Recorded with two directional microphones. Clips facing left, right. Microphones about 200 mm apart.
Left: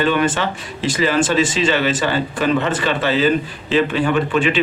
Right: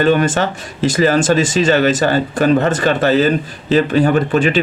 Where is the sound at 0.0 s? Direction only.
45° right (ahead or behind).